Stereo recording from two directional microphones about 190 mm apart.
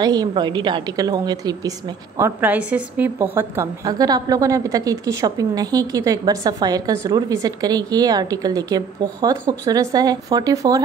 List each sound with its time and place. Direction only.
0.0 s a woman's voice: 20° right (ahead or behind)